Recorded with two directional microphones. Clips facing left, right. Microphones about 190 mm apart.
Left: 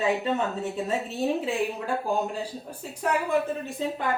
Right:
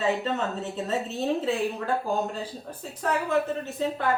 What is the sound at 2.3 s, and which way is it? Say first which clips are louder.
Speech: left 1 dB; 10° left (ahead or behind).